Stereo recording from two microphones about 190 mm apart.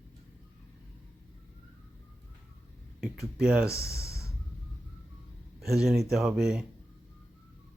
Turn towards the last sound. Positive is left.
turn(degrees=-5)  # may be behind; listen again after turning